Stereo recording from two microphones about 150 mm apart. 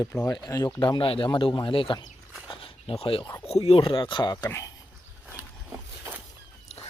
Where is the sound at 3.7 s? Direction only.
35° left (ahead or behind); by 4.7 s 20° left (ahead or behind).